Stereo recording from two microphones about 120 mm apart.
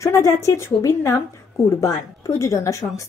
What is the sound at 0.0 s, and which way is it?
A woman's voice, 25° left (ahead or behind).